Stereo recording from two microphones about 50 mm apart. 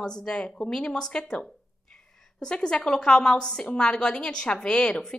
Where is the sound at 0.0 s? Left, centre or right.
Centre.